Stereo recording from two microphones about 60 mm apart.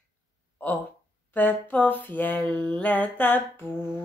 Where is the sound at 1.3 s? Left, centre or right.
Left.